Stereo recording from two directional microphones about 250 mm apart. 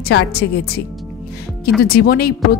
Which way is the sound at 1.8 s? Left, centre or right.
Left.